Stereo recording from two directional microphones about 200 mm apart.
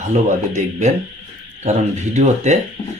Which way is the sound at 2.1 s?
35° right (ahead or behind).